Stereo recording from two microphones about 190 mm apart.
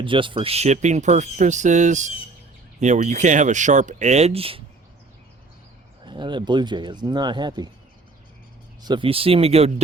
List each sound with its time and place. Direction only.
0.0 s speech: 25° right (ahead or behind)
6.1 s speech: 25° right (ahead or behind)
8.8 s speech: 25° right (ahead or behind)